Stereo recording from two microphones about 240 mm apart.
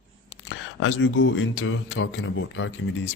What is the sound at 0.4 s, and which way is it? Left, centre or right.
Speech, left.